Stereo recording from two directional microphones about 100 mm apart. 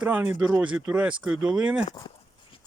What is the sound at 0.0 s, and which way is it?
Speech, 15° right (ahead or behind).